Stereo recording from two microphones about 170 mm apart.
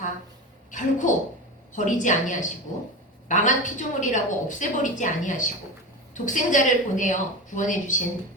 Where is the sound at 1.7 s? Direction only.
45° left (ahead or behind).